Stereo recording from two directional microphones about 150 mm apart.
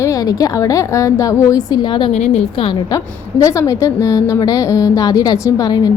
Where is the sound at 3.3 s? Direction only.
20° left (ahead or behind).